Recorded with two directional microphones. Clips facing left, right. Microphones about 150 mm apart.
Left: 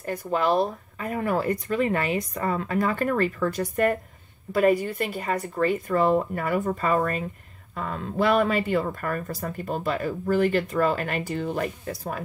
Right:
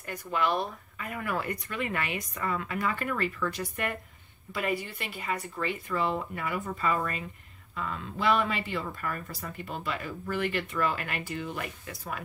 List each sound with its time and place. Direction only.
0.0 s speech: 35° left (ahead or behind)